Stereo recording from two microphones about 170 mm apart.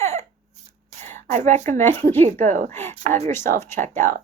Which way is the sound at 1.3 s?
45° right (ahead or behind).